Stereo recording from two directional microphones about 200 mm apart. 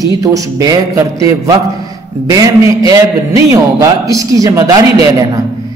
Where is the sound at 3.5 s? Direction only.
15° right (ahead or behind).